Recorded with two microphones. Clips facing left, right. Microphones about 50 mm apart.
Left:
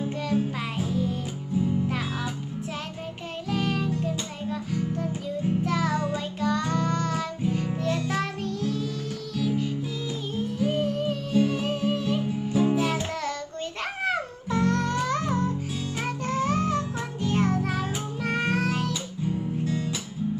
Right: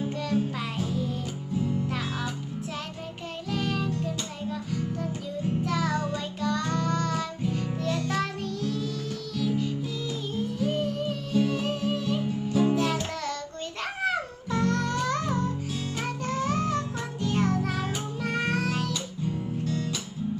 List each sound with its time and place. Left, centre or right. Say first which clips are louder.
0.2 s music: left 2 dB; centre
3.5 s music: left 2 dB; centre